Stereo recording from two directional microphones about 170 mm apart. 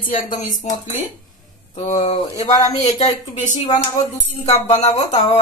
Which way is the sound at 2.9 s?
45° left (ahead or behind).